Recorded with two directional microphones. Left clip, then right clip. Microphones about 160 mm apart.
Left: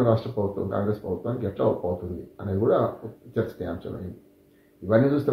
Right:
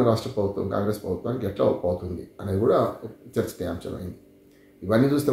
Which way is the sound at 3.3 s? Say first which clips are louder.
Right 1 dB; 15° right (ahead or behind).